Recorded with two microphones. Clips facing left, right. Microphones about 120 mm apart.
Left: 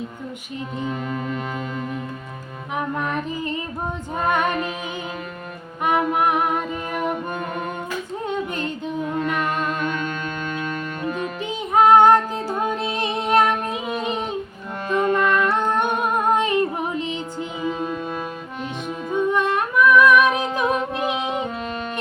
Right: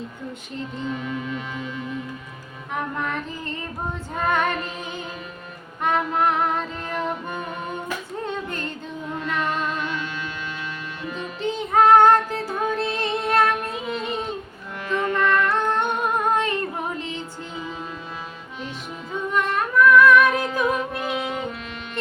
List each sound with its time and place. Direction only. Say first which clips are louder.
0.9 s music: left 1 dB; 45° left (ahead or behind)
2.7 s child singing: left 3 dB; 15° left (ahead or behind)
4.3 s music: left 1 dB; 15° left (ahead or behind)
5.8 s music: left 2 dB; 15° left (ahead or behind)
8.4 s music: left 4 dB; 15° left (ahead or behind)
9.4 s music: left 2 dB; 50° left (ahead or behind)
11.4 s music: left 1 dB; 15° left (ahead or behind)
19.3 s humming: left 2 dB; 15° left (ahead or behind)